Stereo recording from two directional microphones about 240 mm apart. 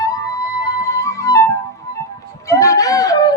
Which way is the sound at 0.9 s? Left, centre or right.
Centre.